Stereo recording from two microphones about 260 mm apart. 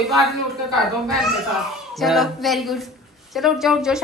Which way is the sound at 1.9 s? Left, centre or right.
Centre.